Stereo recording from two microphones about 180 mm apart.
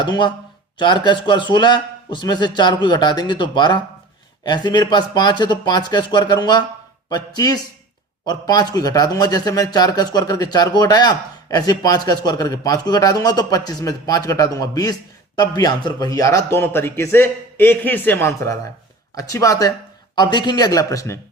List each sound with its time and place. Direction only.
0.0 s a man's voice: 25° left (ahead or behind)